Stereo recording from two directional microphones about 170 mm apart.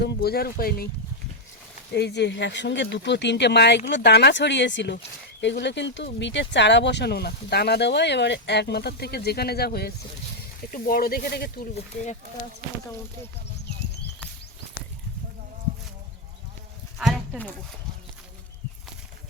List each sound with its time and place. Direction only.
0.0 s speech: 70° left (ahead or behind)
1.9 s speech: 80° left